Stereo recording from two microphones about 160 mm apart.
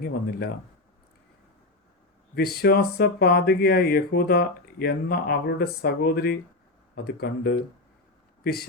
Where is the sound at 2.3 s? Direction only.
75° left (ahead or behind).